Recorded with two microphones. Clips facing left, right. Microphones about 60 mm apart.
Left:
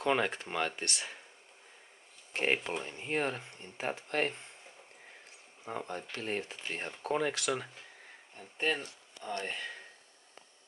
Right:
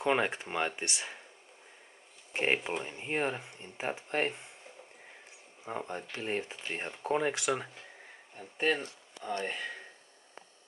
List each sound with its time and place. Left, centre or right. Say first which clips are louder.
0.0 s speech: right 1 dB; centre
2.3 s speech: right 1 dB; centre
5.7 s speech: right 1 dB; centre
8.4 s speech: right 3 dB; centre